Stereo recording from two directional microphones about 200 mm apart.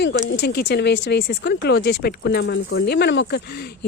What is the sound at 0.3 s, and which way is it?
Speech, 55° left (ahead or behind).